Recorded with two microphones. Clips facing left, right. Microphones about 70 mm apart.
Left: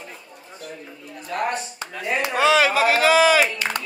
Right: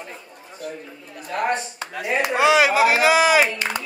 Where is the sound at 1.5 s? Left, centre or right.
Centre.